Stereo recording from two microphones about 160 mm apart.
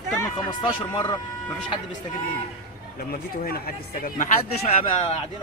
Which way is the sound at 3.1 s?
70° left (ahead or behind).